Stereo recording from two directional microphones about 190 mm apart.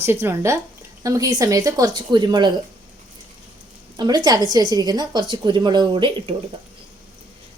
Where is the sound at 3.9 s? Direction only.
20° right (ahead or behind).